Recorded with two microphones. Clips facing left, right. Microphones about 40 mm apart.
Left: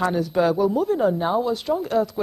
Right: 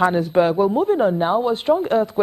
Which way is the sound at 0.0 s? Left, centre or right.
Right.